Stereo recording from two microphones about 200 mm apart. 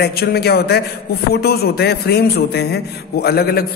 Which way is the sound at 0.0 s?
50° left (ahead or behind).